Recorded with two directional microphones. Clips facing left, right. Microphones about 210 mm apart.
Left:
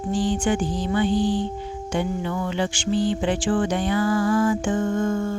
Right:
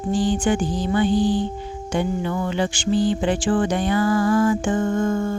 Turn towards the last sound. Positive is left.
turn(degrees=-45)  # may be behind; listen again after turning